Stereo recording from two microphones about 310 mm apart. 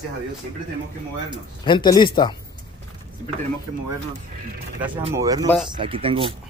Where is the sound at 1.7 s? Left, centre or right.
Centre.